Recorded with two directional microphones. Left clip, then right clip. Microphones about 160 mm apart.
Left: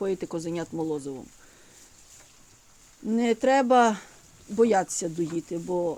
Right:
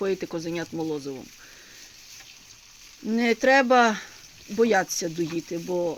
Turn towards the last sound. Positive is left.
turn(degrees=0)  # may be behind; listen again after turning